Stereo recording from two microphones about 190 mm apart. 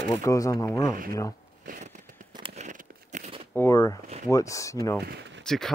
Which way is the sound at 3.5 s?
15° left (ahead or behind).